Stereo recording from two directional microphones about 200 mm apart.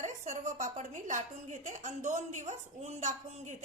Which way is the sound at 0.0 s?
35° right (ahead or behind).